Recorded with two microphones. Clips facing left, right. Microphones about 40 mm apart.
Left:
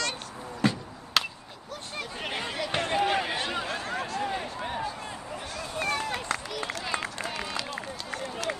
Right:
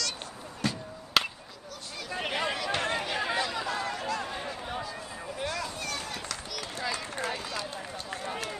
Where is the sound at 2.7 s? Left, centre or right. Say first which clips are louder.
Left 4 dB; centre.